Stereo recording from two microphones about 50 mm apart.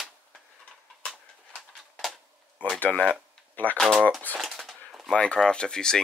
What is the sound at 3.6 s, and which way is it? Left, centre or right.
Speech, left.